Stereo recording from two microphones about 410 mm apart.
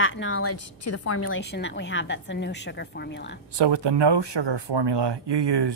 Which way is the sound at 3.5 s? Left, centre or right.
Right.